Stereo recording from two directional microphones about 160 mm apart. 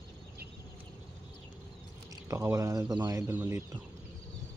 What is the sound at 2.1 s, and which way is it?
Speech, 20° right (ahead or behind).